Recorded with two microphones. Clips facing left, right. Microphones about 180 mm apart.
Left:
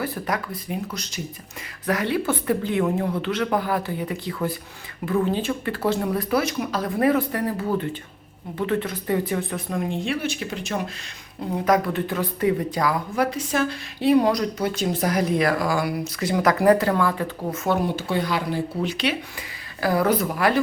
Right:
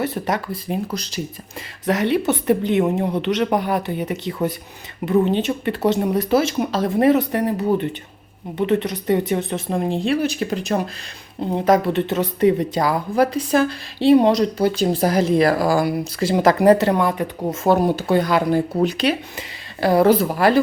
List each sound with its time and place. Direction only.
0.0 s speech: 25° right (ahead or behind)
1.9 s a woman's voice: 25° right (ahead or behind)
17.7 s speech: 40° right (ahead or behind)
19.4 s speech: 25° right (ahead or behind)